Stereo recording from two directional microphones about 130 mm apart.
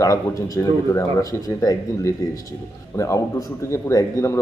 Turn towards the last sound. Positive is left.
turn(degrees=20)  # may be behind; listen again after turning